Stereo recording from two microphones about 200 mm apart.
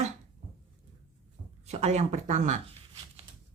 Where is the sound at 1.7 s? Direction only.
35° right (ahead or behind).